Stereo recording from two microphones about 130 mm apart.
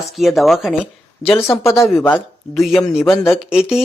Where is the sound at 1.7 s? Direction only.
20° left (ahead or behind).